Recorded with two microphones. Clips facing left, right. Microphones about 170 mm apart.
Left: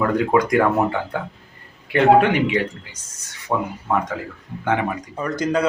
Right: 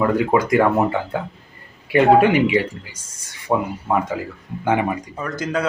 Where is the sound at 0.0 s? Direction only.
5° right (ahead or behind).